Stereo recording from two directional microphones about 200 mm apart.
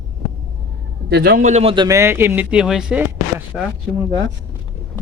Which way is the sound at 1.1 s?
50° right (ahead or behind).